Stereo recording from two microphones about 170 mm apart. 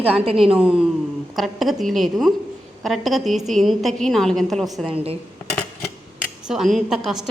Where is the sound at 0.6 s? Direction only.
5° right (ahead or behind).